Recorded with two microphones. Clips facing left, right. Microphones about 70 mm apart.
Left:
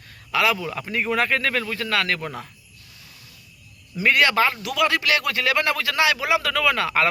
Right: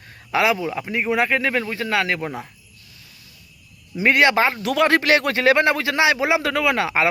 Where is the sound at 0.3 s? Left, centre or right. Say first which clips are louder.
Right 2 dB; right.